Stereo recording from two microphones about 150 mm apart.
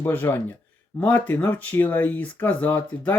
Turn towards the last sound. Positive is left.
turn(degrees=15)  # may be behind; listen again after turning